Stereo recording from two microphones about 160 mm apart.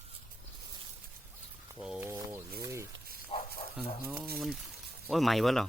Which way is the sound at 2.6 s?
20° right (ahead or behind).